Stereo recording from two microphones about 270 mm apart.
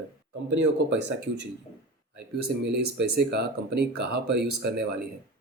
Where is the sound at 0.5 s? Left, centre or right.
Right.